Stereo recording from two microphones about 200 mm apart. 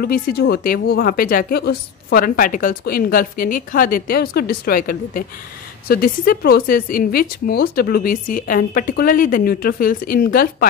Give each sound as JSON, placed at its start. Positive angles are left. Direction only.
{"t": 0.0, "sound": "speech", "side_deg": 50}